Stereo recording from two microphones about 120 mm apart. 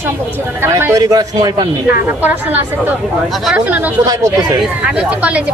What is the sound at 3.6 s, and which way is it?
Speech, 15° right (ahead or behind).